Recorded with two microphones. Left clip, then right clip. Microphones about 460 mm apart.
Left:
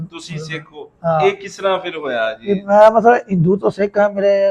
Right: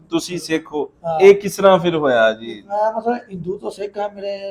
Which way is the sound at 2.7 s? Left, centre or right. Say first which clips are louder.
Left 10 dB; centre.